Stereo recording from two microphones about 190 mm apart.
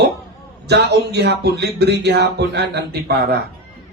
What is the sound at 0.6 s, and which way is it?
Speech, 60° right (ahead or behind).